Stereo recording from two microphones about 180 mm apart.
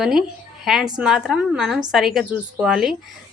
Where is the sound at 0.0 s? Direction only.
Centre (ahead or behind).